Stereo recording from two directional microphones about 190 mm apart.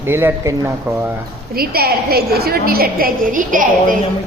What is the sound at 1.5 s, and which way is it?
A woman's voice, 50° right (ahead or behind).